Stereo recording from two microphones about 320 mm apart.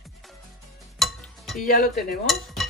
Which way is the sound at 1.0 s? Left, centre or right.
Centre.